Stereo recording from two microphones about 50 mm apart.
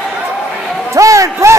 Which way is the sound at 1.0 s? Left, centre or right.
Right.